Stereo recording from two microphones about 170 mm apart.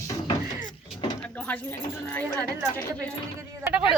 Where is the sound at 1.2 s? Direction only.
10° left (ahead or behind).